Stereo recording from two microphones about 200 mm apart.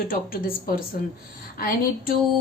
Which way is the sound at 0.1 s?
45° left (ahead or behind).